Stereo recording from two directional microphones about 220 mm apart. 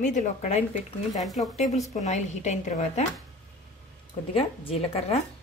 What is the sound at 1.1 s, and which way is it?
Speech, centre (ahead or behind).